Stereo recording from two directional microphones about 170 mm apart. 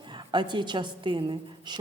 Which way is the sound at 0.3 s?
25° right (ahead or behind).